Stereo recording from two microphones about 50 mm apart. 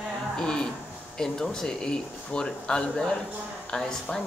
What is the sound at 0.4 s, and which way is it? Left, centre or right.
Speech, centre.